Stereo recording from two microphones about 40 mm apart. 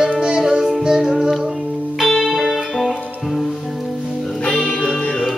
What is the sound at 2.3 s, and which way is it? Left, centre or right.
Music, centre.